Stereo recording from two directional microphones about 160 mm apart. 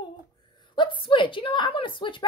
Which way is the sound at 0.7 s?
30° left (ahead or behind).